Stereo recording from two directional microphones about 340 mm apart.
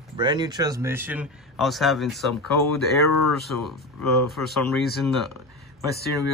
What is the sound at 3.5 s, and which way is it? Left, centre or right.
Speech, centre.